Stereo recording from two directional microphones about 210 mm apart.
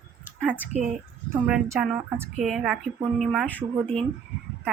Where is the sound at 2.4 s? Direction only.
Centre (ahead or behind).